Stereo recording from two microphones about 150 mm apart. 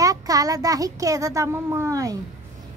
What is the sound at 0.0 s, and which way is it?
Speech, 25° right (ahead or behind).